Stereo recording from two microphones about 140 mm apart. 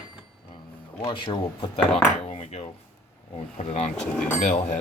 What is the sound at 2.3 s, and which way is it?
Speech, 55° left (ahead or behind).